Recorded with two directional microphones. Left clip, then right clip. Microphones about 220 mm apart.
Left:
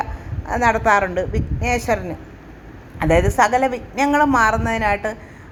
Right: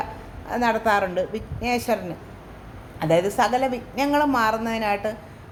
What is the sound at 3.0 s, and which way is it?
Speech, 20° left (ahead or behind).